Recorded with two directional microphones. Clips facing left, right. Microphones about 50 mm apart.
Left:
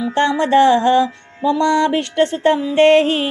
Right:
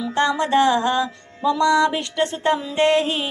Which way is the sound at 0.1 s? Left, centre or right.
Left.